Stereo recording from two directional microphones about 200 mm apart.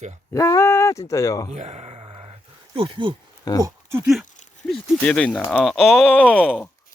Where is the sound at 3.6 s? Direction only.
15° right (ahead or behind).